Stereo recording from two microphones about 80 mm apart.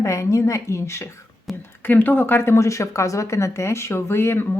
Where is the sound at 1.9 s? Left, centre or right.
Left.